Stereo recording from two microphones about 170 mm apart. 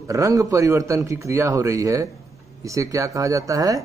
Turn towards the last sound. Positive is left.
turn(degrees=-20)  # may be behind; listen again after turning